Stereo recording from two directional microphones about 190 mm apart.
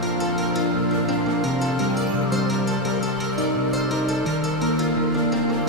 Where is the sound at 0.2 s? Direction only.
Centre (ahead or behind).